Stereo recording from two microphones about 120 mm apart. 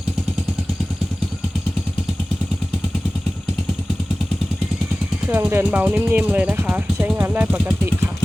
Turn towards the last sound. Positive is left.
turn(degrees=-15)  # may be behind; listen again after turning